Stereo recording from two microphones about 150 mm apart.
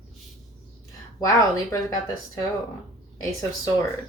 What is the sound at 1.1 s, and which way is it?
Speech, 25° left (ahead or behind).